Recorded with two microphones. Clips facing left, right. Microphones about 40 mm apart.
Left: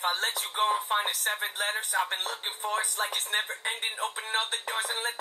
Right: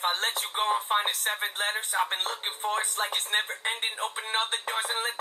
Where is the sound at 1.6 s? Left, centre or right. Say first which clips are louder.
Right 1 dB; right.